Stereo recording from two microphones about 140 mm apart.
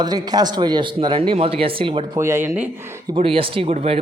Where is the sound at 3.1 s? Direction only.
40° right (ahead or behind).